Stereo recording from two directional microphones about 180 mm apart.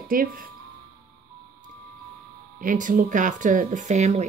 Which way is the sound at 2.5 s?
45° right (ahead or behind).